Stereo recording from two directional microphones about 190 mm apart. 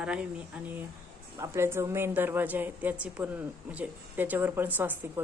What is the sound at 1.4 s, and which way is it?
A woman's voice, 15° right (ahead or behind).